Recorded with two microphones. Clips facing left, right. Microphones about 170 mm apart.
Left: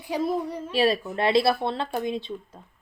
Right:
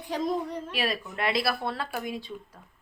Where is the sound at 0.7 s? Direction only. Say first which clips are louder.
Left 12 dB; 30° left (ahead or behind).